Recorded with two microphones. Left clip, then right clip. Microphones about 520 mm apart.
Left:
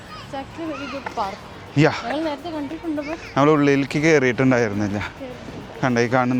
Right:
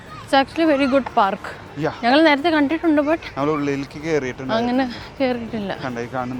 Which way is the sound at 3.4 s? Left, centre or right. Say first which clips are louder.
Left 5 dB; left.